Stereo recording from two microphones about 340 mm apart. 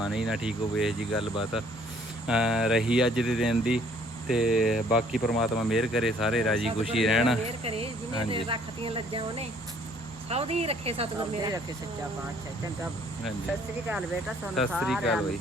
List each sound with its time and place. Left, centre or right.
0.0 s speech: centre
2.2 s speech: centre
7.4 s speech: centre
13.8 s speech: centre